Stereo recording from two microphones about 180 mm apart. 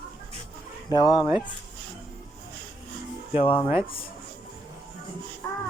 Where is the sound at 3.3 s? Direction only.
30° left (ahead or behind).